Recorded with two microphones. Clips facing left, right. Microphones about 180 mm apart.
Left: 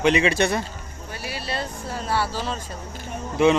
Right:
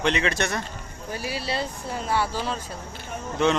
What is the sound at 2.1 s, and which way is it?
Speech, 15° right (ahead or behind).